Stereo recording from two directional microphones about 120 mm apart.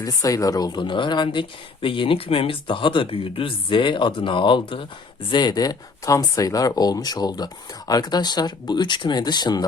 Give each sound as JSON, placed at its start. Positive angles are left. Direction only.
{"t": 0.0, "sound": "speech", "side_deg": 30}